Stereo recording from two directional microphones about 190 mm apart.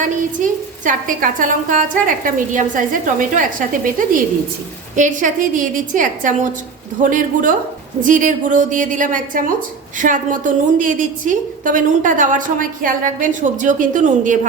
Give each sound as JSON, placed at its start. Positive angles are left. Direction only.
{"t": 0.9, "sound": "a woman's voice", "side_deg": -45}